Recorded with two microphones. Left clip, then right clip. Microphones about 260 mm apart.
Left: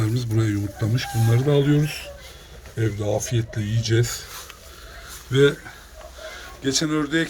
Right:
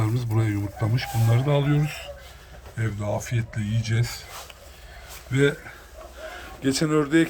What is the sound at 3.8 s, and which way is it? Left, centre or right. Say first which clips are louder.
Speech: left 10 dB; centre.